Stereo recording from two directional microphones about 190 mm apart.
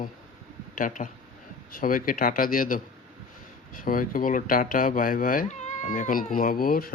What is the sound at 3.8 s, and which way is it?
Speech, 45° left (ahead or behind).